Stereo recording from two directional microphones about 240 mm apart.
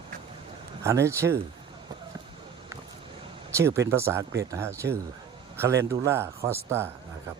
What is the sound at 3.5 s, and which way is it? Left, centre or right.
Speech, centre.